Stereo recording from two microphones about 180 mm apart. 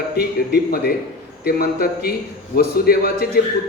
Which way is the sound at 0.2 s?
60° left (ahead or behind).